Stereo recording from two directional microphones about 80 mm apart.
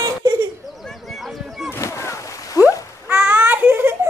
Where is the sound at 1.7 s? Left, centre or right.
Left.